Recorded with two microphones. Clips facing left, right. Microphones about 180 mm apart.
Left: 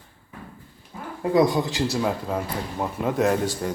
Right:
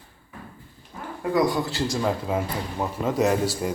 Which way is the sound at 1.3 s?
20° left (ahead or behind).